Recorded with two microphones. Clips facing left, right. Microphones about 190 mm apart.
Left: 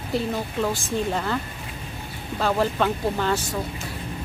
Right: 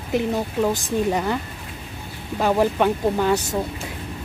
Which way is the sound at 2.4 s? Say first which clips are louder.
Right 4 dB; 15° right (ahead or behind).